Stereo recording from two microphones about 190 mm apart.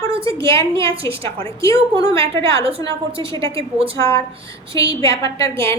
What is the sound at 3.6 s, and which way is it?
Speech, 30° right (ahead or behind).